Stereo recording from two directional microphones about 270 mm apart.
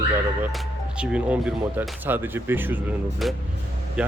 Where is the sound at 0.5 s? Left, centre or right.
Centre.